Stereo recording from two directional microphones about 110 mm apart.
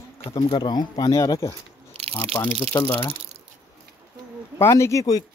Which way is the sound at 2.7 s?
25° left (ahead or behind).